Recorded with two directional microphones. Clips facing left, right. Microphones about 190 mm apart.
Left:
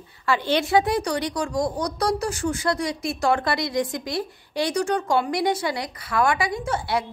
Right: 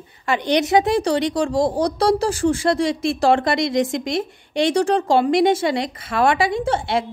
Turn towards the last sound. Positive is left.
turn(degrees=-25)  # may be behind; listen again after turning